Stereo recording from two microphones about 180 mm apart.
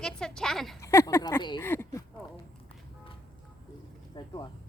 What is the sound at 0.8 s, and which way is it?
Speech, 15° left (ahead or behind).